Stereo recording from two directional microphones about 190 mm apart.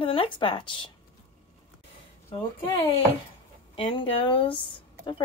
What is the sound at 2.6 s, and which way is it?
Speech, 30° left (ahead or behind).